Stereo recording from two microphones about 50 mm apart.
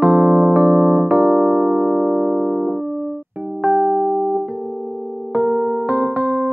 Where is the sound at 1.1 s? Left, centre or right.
Centre.